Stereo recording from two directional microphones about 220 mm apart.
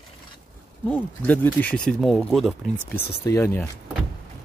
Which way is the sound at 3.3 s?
10° left (ahead or behind).